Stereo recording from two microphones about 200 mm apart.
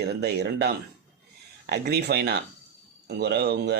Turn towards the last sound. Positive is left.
turn(degrees=-55)  # may be behind; listen again after turning